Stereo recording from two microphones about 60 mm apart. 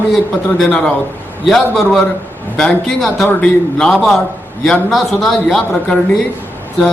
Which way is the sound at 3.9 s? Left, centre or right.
Centre.